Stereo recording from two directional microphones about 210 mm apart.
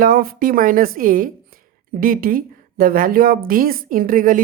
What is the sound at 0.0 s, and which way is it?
A woman's voice, 45° right (ahead or behind).